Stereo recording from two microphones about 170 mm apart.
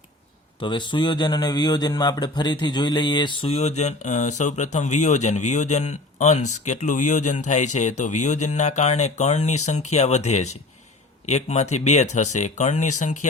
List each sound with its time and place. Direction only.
0.6 s a man's voice: 30° left (ahead or behind); by 13.1 s 45° left (ahead or behind)